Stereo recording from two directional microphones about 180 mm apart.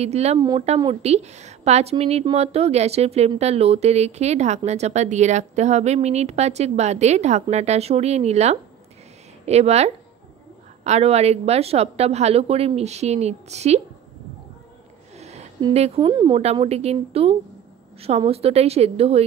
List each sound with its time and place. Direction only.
0.0 s a woman's voice: 35° right (ahead or behind)
15.1 s a sound: 35° right (ahead or behind)
15.7 s a woman's voice: 35° right (ahead or behind)
16.1 s speech: 25° right (ahead or behind)
16.3 s a woman's voice: 35° right (ahead or behind)